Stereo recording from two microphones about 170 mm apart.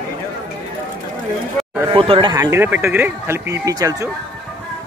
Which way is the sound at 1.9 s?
30° right (ahead or behind).